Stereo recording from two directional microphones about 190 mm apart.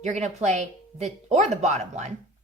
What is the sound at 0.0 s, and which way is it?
Speech, 40° right (ahead or behind).